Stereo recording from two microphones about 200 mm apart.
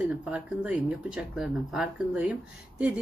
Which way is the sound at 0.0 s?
5° right (ahead or behind).